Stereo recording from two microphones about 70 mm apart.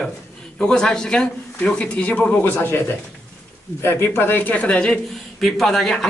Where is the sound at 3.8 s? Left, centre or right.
Left.